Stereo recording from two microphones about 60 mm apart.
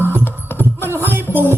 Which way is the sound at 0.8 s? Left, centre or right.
Right.